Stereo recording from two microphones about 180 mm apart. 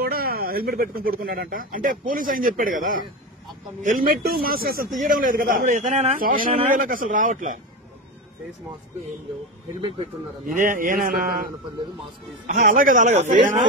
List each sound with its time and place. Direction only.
0.0 s a man's voice: 55° right (ahead or behind)
9.8 s speech: 30° right (ahead or behind)
10.4 s a man's voice: 45° right (ahead or behind)